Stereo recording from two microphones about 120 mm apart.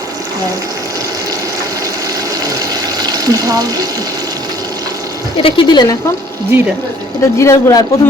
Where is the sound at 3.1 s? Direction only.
30° right (ahead or behind).